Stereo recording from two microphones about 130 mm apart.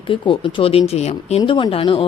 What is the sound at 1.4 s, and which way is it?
Speech, 40° left (ahead or behind).